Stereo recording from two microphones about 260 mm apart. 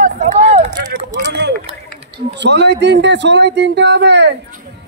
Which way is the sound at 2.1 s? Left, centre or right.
Right.